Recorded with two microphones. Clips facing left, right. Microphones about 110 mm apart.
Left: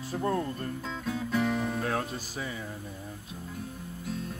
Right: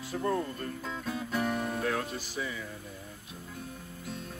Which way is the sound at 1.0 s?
5° right (ahead or behind).